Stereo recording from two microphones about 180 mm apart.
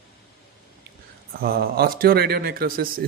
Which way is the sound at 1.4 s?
55° right (ahead or behind).